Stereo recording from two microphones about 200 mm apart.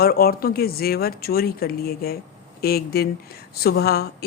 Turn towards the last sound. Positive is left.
turn(degrees=50)  # may be behind; listen again after turning